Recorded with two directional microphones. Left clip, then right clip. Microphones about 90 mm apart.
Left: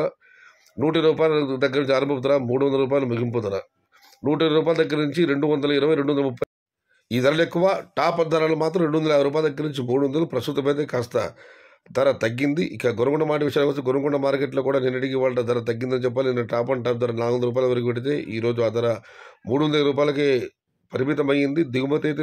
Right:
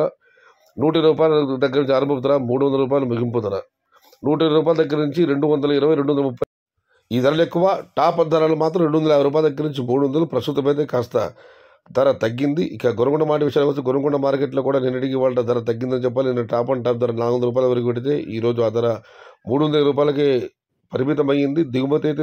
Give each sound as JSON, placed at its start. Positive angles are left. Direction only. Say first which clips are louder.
{"t": 0.7, "sound": "a man's voice", "louder": "right 3 dB", "side_deg": -40}